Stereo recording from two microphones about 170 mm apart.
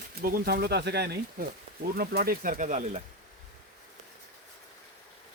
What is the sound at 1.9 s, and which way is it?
Speech, 60° right (ahead or behind).